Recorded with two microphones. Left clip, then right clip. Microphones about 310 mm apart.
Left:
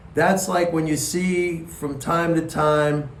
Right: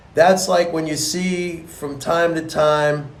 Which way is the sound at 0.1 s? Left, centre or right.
Centre.